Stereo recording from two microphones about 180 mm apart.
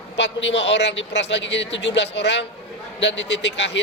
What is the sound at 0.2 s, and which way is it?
A man's voice, 75° left (ahead or behind).